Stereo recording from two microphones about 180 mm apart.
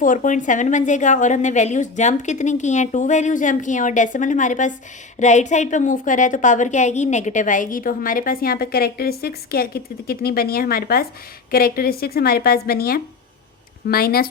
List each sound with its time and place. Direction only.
0.0 s a woman's voice: 45° left (ahead or behind)